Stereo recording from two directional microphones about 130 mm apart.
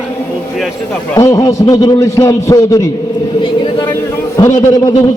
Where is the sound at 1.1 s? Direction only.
25° left (ahead or behind).